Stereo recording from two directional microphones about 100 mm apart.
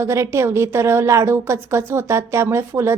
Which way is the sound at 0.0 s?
30° right (ahead or behind).